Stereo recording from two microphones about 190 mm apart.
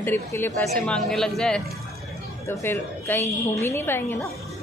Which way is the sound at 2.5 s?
15° left (ahead or behind).